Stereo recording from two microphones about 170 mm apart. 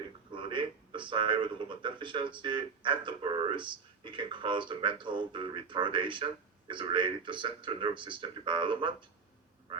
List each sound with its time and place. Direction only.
0.3 s speech: 30° right (ahead or behind)